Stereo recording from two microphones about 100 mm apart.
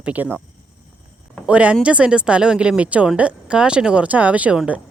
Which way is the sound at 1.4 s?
10° right (ahead or behind).